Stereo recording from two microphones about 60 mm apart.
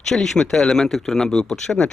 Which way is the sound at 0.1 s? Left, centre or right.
Centre.